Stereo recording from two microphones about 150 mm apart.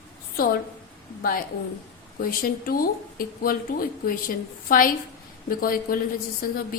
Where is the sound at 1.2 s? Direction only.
75° left (ahead or behind).